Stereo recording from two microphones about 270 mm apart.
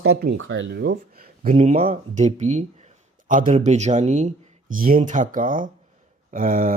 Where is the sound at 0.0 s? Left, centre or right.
Right.